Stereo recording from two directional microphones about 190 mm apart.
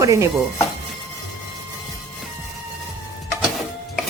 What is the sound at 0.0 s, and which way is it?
Speech, 15° right (ahead or behind).